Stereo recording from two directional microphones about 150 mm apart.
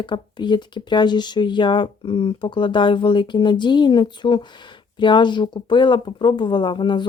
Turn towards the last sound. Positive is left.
turn(degrees=30)  # may be behind; listen again after turning